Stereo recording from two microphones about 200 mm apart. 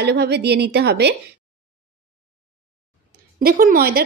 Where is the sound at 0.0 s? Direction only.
55° right (ahead or behind).